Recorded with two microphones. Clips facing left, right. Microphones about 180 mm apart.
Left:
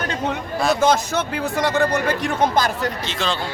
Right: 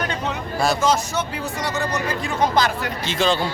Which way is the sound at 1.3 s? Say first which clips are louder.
Left 6 dB; 60° left (ahead or behind).